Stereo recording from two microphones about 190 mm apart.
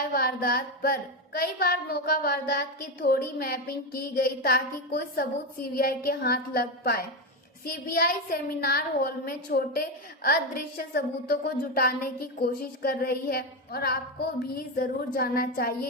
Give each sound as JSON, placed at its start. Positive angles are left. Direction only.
{"t": 0.1, "sound": "speech", "side_deg": 55}